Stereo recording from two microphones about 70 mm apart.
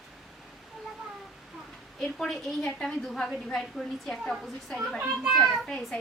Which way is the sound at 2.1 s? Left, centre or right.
Centre.